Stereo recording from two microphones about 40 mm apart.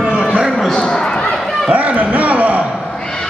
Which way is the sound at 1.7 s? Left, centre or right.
Right.